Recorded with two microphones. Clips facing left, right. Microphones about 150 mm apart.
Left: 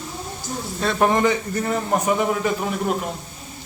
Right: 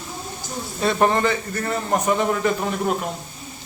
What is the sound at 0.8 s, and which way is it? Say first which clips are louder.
Speech: right 1 dB; centre (ahead or behind).